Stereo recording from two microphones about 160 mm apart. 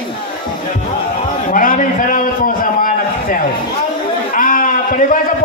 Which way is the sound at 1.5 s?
60° left (ahead or behind).